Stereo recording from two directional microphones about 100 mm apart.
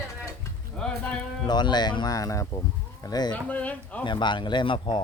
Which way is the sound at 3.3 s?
15° left (ahead or behind).